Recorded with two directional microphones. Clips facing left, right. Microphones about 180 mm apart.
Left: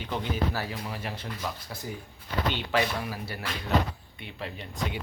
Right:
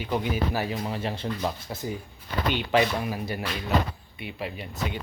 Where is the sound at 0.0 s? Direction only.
10° right (ahead or behind).